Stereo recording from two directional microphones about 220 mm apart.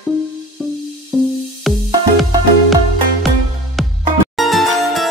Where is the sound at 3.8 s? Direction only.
Centre (ahead or behind).